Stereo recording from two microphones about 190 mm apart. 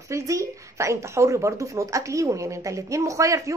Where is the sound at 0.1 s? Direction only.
15° right (ahead or behind).